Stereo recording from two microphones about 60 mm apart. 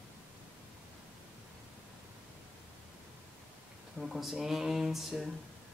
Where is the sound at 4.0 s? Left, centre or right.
Centre.